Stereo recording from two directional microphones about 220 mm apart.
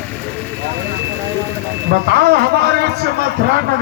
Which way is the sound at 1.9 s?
45° right (ahead or behind).